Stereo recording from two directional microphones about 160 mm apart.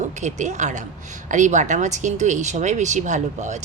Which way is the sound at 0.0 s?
50° right (ahead or behind).